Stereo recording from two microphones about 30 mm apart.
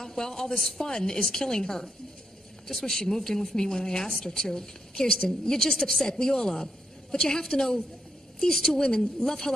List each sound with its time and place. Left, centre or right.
0.0 s a woman's voice: centre
8.7 s a woman's voice: centre